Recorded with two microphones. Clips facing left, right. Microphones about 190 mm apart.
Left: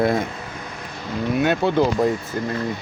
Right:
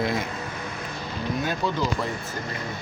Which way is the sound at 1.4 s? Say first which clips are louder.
Left 9 dB; 65° left (ahead or behind).